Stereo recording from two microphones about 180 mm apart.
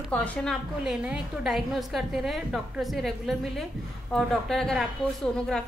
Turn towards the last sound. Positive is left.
turn(degrees=5)  # may be behind; listen again after turning